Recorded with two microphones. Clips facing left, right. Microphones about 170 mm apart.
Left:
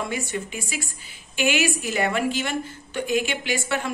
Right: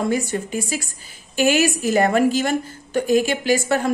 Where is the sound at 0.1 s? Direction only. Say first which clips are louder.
Right 7 dB; 40° right (ahead or behind).